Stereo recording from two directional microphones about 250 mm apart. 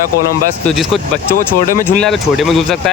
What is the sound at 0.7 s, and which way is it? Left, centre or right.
Speech, centre.